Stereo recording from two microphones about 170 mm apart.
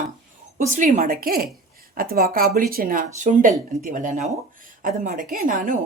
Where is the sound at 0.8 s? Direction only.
55° right (ahead or behind).